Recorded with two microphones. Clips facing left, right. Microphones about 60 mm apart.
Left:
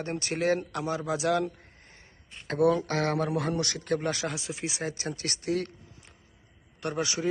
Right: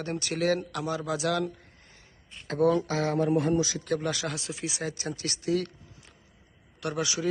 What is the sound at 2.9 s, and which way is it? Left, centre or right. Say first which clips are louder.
Speech: right 2 dB; left.